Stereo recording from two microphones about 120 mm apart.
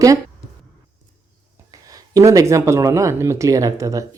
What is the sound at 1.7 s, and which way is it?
Speech, 30° right (ahead or behind).